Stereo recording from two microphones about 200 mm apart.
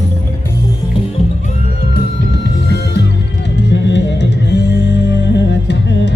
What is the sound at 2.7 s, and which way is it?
Music, 55° left (ahead or behind).